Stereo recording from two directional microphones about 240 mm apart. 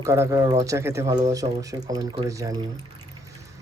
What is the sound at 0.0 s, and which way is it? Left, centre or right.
Speech, centre.